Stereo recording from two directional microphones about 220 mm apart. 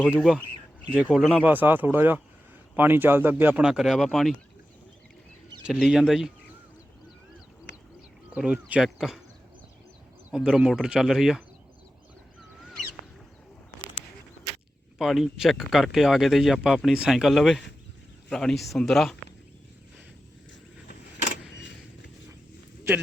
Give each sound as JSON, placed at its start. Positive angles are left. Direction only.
{"t": 0.0, "sound": "speech", "side_deg": 0}
{"t": 5.6, "sound": "speech", "side_deg": -5}
{"t": 7.7, "sound": "bird", "side_deg": 50}
{"t": 8.3, "sound": "speech", "side_deg": -5}
{"t": 10.3, "sound": "speech", "side_deg": -5}
{"t": 12.4, "sound": "crow", "side_deg": 0}
{"t": 14.9, "sound": "speech", "side_deg": 0}